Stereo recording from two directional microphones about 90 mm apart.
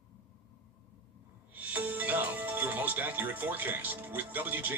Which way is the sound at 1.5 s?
20° right (ahead or behind).